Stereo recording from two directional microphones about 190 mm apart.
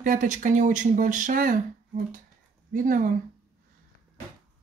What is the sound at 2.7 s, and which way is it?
Speech, 45° right (ahead or behind).